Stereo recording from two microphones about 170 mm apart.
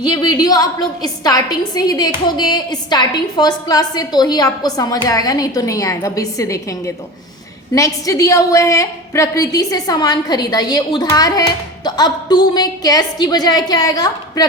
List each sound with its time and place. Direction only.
0.0 s a woman's voice: 25° left (ahead or behind)